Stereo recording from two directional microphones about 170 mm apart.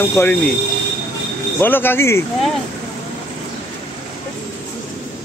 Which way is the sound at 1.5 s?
10° left (ahead or behind).